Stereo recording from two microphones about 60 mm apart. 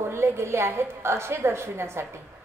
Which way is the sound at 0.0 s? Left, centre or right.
Right.